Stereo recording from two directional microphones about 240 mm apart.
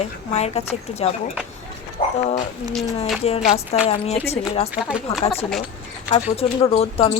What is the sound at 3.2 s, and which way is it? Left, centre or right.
Speech, left.